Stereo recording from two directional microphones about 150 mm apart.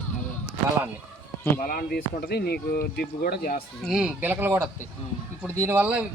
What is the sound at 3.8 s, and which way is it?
Speech, 5° right (ahead or behind).